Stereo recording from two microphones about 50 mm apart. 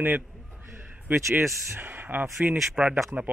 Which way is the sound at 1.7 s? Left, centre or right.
Right.